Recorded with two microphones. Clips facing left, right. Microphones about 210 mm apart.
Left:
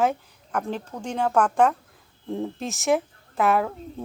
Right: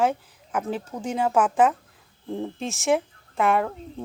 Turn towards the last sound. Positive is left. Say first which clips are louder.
# even
turn(degrees=0)  # may be behind; listen again after turning